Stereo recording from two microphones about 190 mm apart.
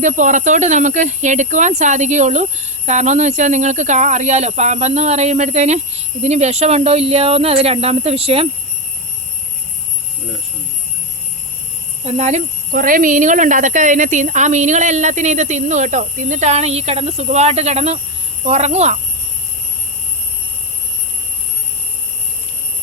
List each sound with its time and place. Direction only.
0.0 s speech: 40° right (ahead or behind)
12.0 s speech: 35° right (ahead or behind)